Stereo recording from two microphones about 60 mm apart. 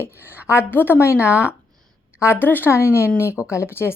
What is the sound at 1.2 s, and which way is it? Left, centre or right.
Speech, right.